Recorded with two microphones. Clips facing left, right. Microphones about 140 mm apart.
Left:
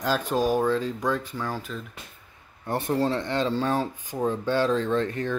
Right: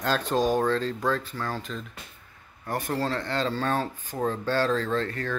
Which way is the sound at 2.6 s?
20° left (ahead or behind).